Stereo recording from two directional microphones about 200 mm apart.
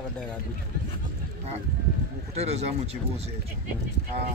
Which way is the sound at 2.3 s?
30° right (ahead or behind).